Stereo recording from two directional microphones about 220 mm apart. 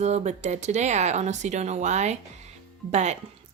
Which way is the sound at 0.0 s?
30° right (ahead or behind).